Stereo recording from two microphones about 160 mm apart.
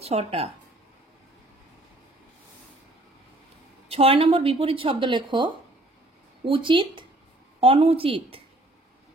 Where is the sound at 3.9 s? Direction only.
35° right (ahead or behind).